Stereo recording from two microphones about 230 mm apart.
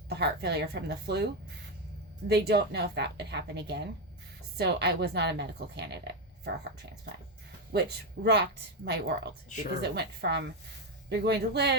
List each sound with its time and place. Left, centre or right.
0.1 s speech: right
7.7 s speech: right